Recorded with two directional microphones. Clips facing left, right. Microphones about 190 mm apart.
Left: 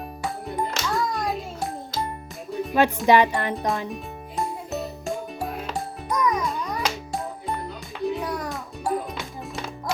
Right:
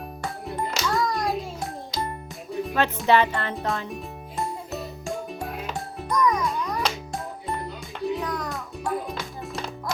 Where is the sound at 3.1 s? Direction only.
15° left (ahead or behind).